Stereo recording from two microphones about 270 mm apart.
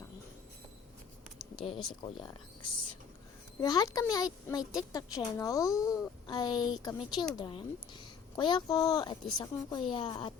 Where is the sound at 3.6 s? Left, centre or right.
Centre.